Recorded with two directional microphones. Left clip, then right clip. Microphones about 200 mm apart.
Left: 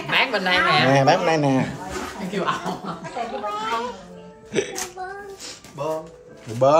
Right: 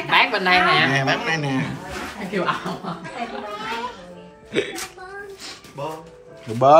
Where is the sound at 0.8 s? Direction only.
30° left (ahead or behind).